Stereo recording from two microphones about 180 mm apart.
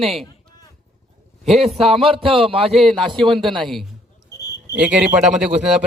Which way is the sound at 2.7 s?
Centre (ahead or behind).